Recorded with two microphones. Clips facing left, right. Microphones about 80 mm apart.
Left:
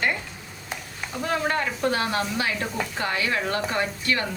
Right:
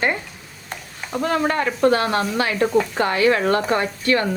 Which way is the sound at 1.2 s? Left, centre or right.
Right.